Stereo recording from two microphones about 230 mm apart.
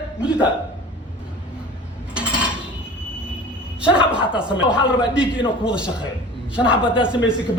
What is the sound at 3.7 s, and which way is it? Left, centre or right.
Speech, centre.